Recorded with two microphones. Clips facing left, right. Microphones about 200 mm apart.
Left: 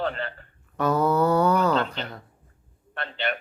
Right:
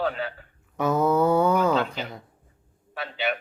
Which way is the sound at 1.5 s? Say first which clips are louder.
Even; 5° right (ahead or behind).